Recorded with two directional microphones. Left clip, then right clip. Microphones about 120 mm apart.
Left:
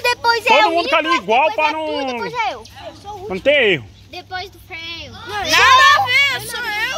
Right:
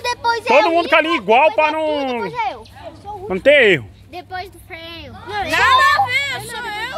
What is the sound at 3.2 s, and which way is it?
Speech, 30° right (ahead or behind).